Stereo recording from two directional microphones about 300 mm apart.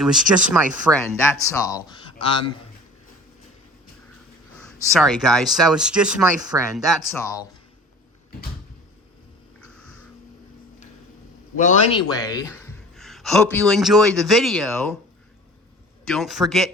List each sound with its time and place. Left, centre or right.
0.0 s speech: centre
1.2 s speech: centre
4.9 s speech: centre
7.1 s speech: centre
9.6 s music: centre
11.5 s a man's voice: left
12.0 s a man's voice: centre
16.0 s speech: centre